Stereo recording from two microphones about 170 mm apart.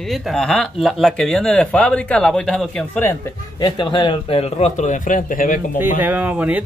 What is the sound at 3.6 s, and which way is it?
A man's voice, 25° left (ahead or behind).